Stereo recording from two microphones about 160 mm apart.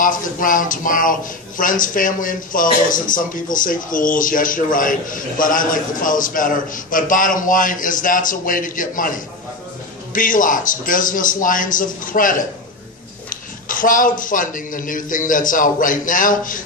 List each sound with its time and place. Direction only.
0.0 s speech: 55° left (ahead or behind)